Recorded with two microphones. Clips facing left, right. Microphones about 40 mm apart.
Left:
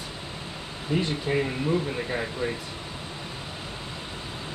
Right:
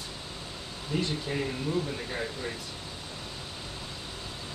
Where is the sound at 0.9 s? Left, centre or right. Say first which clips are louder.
Left 5 dB; left.